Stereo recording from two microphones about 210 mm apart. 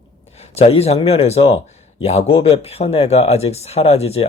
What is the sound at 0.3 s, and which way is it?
Speech, 30° left (ahead or behind).